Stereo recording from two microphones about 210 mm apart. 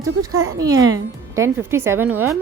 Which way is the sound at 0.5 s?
15° right (ahead or behind).